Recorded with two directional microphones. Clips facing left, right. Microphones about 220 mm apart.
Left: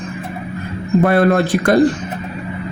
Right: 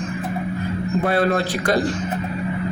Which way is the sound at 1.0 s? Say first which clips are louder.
Left 6 dB; 55° left (ahead or behind).